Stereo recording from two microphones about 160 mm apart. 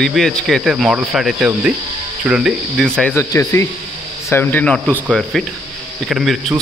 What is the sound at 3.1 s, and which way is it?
Speech, 20° left (ahead or behind).